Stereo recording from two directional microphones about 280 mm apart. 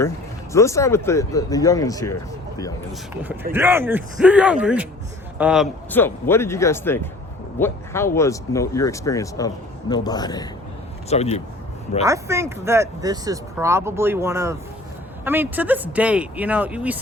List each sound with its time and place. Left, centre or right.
0.5 s speech: centre
3.5 s speech: centre; by 11.4 s left
12.0 s speech: centre